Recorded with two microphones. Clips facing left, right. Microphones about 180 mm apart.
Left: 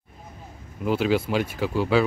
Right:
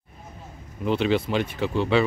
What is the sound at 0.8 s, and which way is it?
Speech, 5° left (ahead or behind).